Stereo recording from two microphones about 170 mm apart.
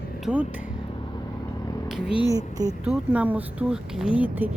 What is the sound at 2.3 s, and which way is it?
Speech, 20° right (ahead or behind).